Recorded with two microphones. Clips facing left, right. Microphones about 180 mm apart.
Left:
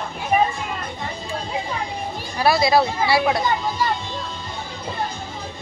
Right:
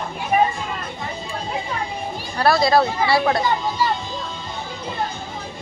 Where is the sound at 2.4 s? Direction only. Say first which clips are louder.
Right 1 dB; 5° left (ahead or behind).